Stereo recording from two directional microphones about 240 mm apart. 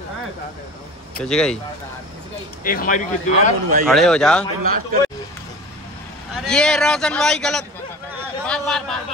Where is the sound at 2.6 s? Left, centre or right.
Left.